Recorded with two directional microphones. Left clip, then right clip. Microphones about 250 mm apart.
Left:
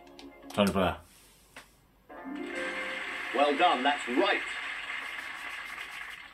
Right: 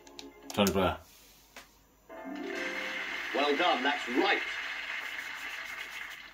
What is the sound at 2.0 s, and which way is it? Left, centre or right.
Music, centre.